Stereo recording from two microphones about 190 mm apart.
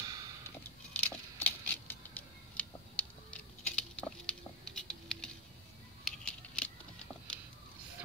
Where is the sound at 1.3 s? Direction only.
10° left (ahead or behind).